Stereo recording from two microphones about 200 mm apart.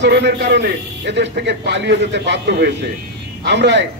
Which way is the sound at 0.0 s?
55° right (ahead or behind).